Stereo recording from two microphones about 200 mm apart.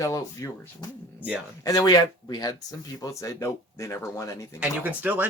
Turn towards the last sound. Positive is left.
turn(degrees=-10)  # may be behind; listen again after turning